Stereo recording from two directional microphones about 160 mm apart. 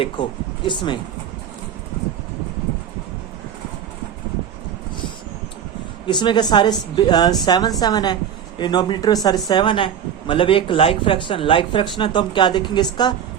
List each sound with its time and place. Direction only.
0.0 s speech: 30° left (ahead or behind)
6.1 s speech: 30° left (ahead or behind)